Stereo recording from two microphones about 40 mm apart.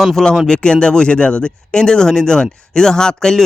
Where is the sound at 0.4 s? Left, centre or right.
Left.